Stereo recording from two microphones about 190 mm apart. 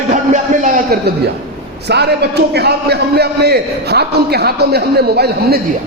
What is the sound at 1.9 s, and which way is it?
A man's voice, 60° right (ahead or behind).